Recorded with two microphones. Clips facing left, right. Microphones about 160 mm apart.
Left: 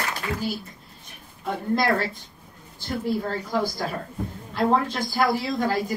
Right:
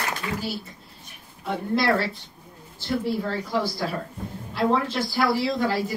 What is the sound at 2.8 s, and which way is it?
A woman's voice, 45° left (ahead or behind).